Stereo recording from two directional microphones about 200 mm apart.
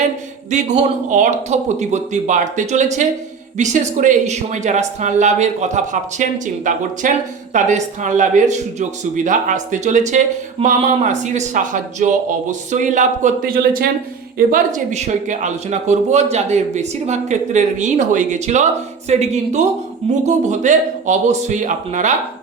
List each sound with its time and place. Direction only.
0.5 s speech: 35° right (ahead or behind)